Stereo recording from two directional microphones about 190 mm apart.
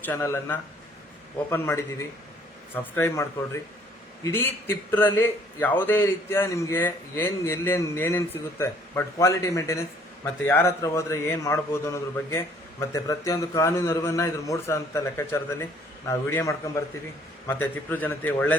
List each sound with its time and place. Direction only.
0.0 s a man's voice: 10° left (ahead or behind)